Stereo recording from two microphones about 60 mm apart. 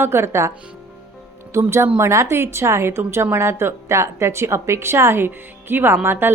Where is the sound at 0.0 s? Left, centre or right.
Right.